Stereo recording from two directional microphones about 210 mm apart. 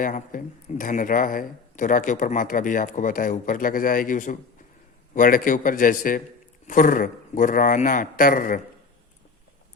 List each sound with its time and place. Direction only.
0.0 s speech: 40° left (ahead or behind)